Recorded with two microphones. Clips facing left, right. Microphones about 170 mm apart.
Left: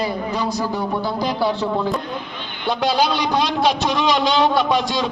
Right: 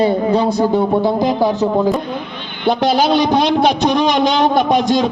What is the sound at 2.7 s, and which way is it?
A man's voice, 50° right (ahead or behind).